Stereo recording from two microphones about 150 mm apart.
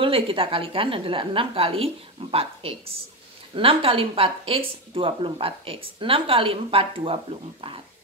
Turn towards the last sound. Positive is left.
turn(degrees=-35)  # may be behind; listen again after turning